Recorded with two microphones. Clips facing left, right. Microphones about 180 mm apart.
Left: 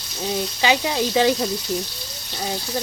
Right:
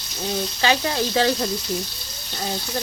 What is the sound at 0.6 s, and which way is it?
Speech, 15° left (ahead or behind).